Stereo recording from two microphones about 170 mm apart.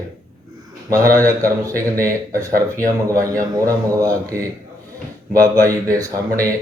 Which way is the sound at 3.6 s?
20° right (ahead or behind).